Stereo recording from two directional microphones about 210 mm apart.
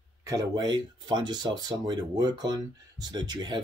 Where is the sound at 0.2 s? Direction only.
15° right (ahead or behind).